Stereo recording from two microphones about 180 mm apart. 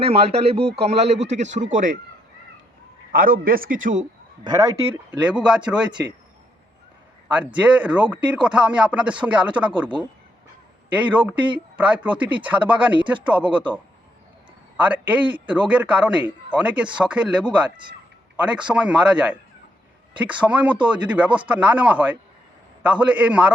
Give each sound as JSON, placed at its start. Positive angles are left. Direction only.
{"t": 0.0, "sound": "speech", "side_deg": -35}
{"t": 0.6, "sound": "a man's voice", "side_deg": -65}
{"t": 0.9, "sound": "a man's voice", "side_deg": -35}
{"t": 3.1, "sound": "a man's voice", "side_deg": -50}
{"t": 4.4, "sound": "speech", "side_deg": -20}
{"t": 5.2, "sound": "speech", "side_deg": -5}
{"t": 7.3, "sound": "a man's voice", "side_deg": -5}
{"t": 10.9, "sound": "a man's voice", "side_deg": -10}
{"t": 14.8, "sound": "a man's voice", "side_deg": -10}